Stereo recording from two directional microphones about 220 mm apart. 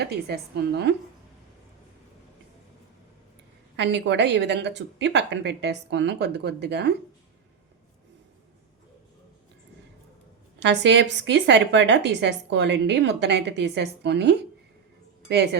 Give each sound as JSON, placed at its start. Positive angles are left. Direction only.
{"t": 0.0, "sound": "a woman's voice", "side_deg": -45}
{"t": 3.8, "sound": "a woman's voice", "side_deg": -50}
{"t": 10.6, "sound": "a woman's voice", "side_deg": -55}